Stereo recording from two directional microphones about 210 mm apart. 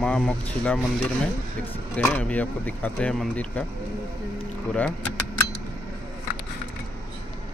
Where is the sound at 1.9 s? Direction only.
5° left (ahead or behind).